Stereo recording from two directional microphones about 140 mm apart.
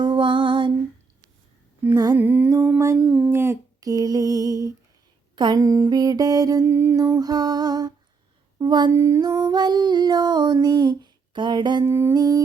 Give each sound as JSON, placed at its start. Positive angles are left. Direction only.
{"t": 0.0, "sound": "music", "side_deg": -35}
{"t": 1.8, "sound": "humming", "side_deg": -20}
{"t": 2.1, "sound": "music", "side_deg": -15}
{"t": 3.0, "sound": "a sound", "side_deg": -5}
{"t": 3.3, "sound": "a sound", "side_deg": -20}
{"t": 5.4, "sound": "mantra", "side_deg": -30}
{"t": 8.5, "sound": "a sound", "side_deg": -30}
{"t": 8.9, "sound": "music", "side_deg": -20}
{"t": 11.9, "sound": "mantra", "side_deg": -25}